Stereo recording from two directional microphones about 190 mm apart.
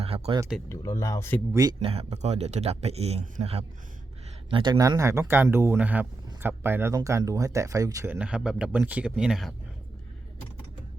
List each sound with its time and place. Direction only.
0.0 s a sound: 30° right (ahead or behind)
0.7 s speech: 15° left (ahead or behind)
1.8 s speech: 30° right (ahead or behind); by 9.5 s centre (ahead or behind)